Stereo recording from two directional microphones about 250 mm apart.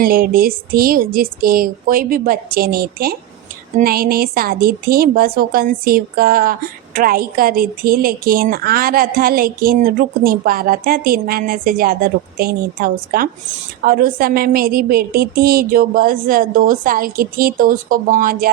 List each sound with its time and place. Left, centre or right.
0.0 s a woman's voice: right